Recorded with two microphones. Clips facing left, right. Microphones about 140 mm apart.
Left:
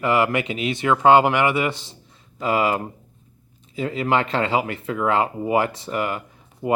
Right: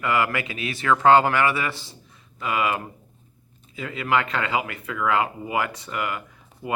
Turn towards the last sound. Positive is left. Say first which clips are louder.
# left 7 dB
turn(degrees=30)  # may be behind; listen again after turning